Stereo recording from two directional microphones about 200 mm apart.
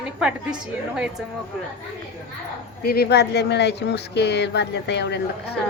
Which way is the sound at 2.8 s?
50° left (ahead or behind).